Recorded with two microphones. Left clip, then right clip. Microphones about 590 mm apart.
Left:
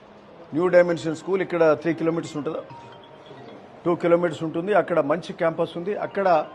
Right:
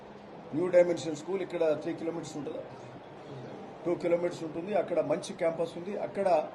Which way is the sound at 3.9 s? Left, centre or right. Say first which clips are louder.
Left 9 dB; left.